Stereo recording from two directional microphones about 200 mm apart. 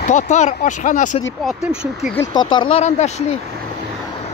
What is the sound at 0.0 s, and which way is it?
Speech, 40° left (ahead or behind).